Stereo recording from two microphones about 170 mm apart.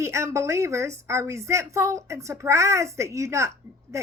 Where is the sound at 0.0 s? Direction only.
15° right (ahead or behind).